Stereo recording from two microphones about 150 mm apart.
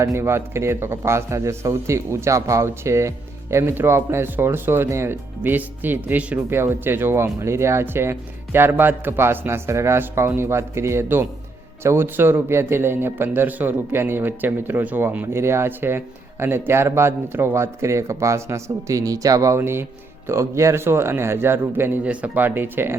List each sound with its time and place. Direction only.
0.0 s a man's voice: 15° right (ahead or behind)